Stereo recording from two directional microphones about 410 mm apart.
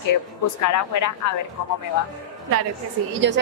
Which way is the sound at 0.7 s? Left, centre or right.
Left.